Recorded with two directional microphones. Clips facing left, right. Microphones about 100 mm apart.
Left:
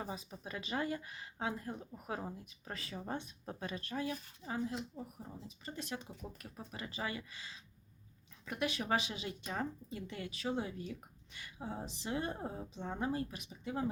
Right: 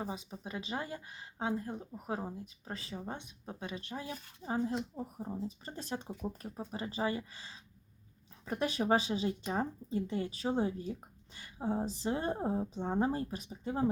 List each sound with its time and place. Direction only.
0.0 s speech: 20° right (ahead or behind)
3.1 s speech: 15° right (ahead or behind); by 13.8 s 35° right (ahead or behind)